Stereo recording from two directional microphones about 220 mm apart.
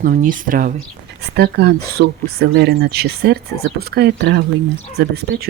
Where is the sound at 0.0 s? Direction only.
40° right (ahead or behind).